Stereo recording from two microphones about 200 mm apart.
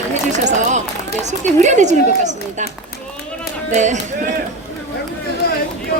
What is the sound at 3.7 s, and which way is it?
Speech, 35° right (ahead or behind).